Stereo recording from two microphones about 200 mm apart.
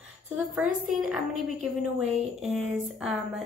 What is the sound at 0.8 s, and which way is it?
A woman's voice, centre (ahead or behind).